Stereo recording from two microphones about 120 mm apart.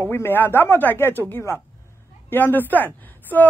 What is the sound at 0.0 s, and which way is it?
Speech, 20° left (ahead or behind).